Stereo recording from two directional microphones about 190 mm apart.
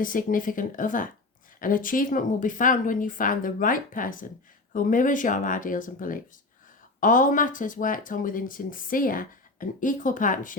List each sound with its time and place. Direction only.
0.0 s speech: 45° left (ahead or behind)